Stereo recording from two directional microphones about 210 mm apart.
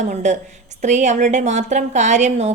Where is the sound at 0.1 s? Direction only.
35° right (ahead or behind).